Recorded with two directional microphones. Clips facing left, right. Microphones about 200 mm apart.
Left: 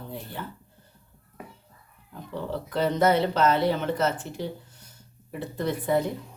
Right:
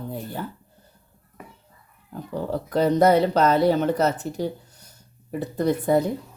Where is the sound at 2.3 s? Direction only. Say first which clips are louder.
Right 5 dB; 40° right (ahead or behind).